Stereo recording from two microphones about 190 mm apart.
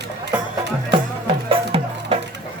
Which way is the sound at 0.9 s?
25° right (ahead or behind).